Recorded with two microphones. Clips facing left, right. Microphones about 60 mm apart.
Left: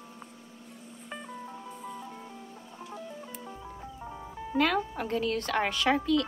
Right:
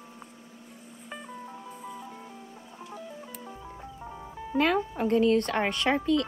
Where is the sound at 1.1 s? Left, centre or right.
Centre.